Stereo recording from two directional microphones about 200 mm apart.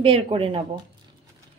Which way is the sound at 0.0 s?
25° right (ahead or behind).